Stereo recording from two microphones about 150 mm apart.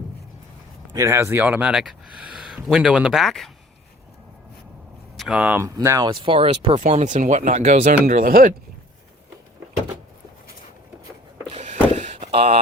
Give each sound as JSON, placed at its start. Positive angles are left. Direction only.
{"t": 0.9, "sound": "speech", "side_deg": -20}
{"t": 5.1, "sound": "a sound", "side_deg": 0}
{"t": 5.4, "sound": "speech", "side_deg": -10}
{"t": 5.6, "sound": "speech", "side_deg": -20}
{"t": 6.7, "sound": "speech", "side_deg": -55}
{"t": 8.0, "sound": "speech", "side_deg": -70}
{"t": 11.4, "sound": "a sound", "side_deg": -45}